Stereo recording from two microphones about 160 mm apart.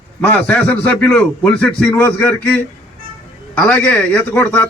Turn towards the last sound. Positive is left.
turn(degrees=10)  # may be behind; listen again after turning